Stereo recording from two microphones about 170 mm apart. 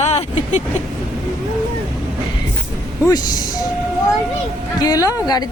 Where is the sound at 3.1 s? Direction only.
20° left (ahead or behind).